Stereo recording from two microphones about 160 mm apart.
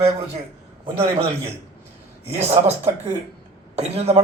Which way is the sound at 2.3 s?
40° right (ahead or behind).